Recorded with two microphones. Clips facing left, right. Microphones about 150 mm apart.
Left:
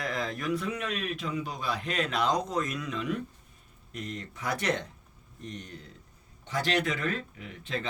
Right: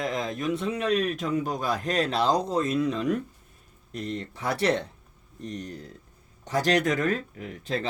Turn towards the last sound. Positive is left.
turn(degrees=-40)  # may be behind; listen again after turning